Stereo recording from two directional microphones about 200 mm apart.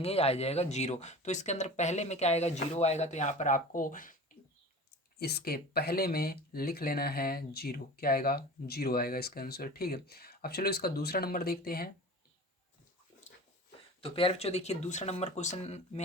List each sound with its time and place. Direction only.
0.0 s speech: 30° left (ahead or behind)
5.2 s speech: 50° left (ahead or behind)
14.0 s speech: 25° left (ahead or behind)